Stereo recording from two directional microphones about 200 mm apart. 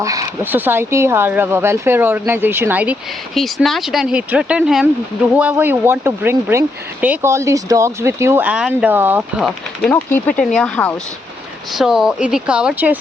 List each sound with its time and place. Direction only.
0.0 s speech: 15° right (ahead or behind)
9.8 s speech: 10° left (ahead or behind); by 13.0 s 5° right (ahead or behind)